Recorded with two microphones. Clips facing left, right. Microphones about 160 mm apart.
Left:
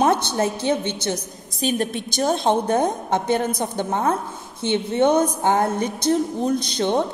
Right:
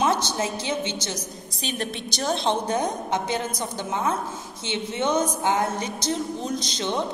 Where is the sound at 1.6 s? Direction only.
45° left (ahead or behind).